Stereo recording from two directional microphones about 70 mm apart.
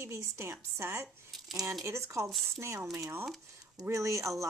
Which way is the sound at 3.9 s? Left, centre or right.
Right.